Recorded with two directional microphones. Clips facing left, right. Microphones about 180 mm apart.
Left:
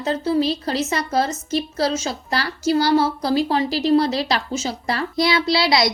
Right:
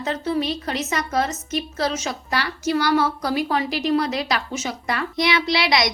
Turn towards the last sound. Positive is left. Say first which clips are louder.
# left 2 dB
turn(degrees=30)  # may be behind; listen again after turning